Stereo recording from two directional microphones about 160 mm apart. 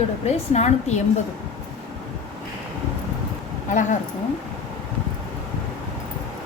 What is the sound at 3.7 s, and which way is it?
Speech, 50° left (ahead or behind).